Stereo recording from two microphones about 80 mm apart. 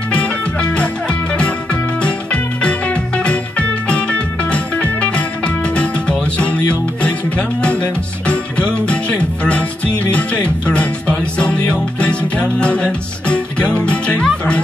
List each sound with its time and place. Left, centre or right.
0.1 s music: centre
2.0 s music: centre